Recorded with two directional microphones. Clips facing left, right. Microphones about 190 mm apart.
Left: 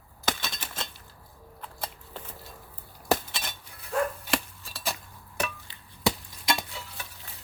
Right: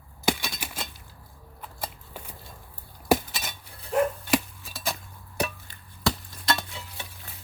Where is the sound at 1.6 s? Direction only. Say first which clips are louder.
Right 1 dB; 10° right (ahead or behind).